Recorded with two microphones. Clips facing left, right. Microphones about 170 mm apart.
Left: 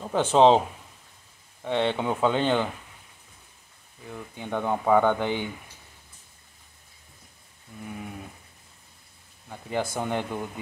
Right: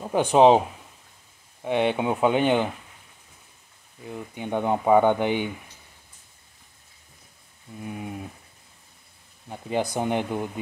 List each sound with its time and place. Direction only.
0.0 s speech: 15° right (ahead or behind)
1.6 s speech: 15° right (ahead or behind)
4.1 s speech: 15° right (ahead or behind)
7.8 s speech: 20° right (ahead or behind)
9.5 s speech: 20° right (ahead or behind)